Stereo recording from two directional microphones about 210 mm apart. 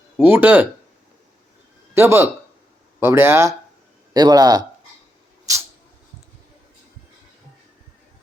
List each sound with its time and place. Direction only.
0.2 s speech: 10° right (ahead or behind)
2.0 s speech: 10° right (ahead or behind)